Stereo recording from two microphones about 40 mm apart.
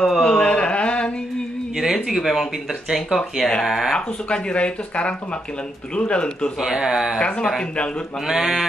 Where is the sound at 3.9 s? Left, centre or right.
Left.